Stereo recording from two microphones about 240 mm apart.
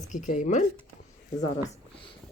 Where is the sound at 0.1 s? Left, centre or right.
Left.